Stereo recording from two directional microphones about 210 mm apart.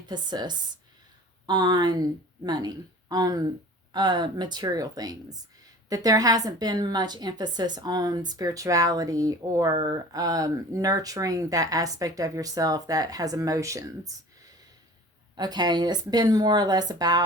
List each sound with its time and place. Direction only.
0.1 s a woman's voice: 20° right (ahead or behind)
15.4 s speech: 20° right (ahead or behind)